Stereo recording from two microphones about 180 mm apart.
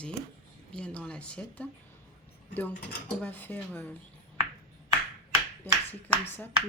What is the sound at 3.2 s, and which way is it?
Speech, 10° left (ahead or behind).